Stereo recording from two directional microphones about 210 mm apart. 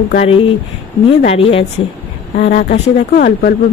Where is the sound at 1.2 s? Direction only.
30° left (ahead or behind); by 3.5 s 45° left (ahead or behind).